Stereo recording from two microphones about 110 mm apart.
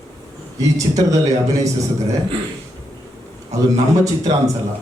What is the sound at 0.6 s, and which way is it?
A man's voice, 30° right (ahead or behind).